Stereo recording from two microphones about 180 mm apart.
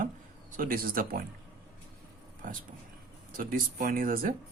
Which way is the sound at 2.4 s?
50° right (ahead or behind).